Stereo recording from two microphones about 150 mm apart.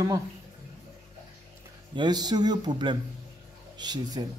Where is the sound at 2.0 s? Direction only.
25° right (ahead or behind).